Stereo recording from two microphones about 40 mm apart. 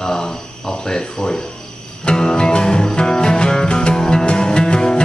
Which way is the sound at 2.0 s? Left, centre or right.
Centre.